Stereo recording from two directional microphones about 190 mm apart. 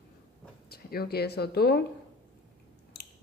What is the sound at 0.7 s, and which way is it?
Speech, 55° left (ahead or behind).